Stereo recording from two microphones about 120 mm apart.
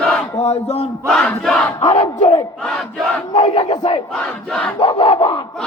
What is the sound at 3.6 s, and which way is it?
Battle cry, 35° left (ahead or behind).